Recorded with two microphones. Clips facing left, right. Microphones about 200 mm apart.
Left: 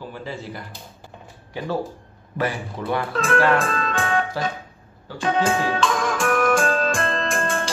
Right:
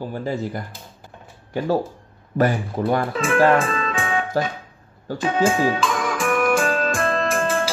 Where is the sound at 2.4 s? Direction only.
45° right (ahead or behind).